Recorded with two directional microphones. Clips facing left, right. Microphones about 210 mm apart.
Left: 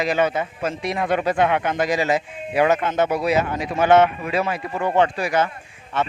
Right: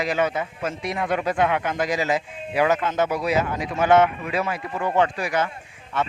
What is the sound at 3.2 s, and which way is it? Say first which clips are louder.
Speech: left 2 dB; 70° left (ahead or behind).